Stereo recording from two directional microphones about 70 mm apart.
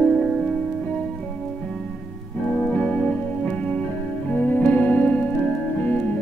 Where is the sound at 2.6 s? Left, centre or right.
Centre.